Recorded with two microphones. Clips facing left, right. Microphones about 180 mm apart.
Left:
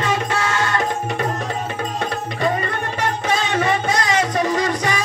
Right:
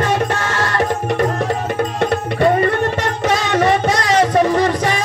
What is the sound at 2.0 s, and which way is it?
Music, 65° right (ahead or behind).